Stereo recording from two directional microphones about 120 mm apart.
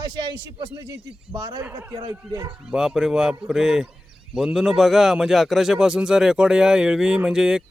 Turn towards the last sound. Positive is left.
turn(degrees=-5)  # may be behind; listen again after turning